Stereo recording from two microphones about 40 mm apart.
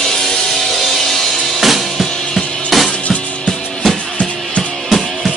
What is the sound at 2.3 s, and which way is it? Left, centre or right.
Music, centre.